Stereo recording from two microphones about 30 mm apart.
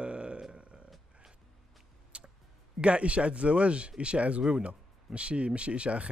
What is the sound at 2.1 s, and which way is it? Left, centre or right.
Music, right.